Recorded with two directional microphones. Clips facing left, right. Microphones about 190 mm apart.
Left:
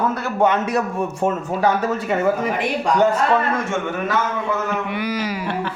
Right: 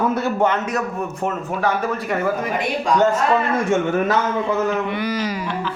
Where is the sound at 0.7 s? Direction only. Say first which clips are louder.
Left 2 dB; 30° left (ahead or behind).